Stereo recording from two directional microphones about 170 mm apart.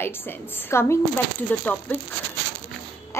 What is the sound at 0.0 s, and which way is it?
A woman's voice, 15° left (ahead or behind).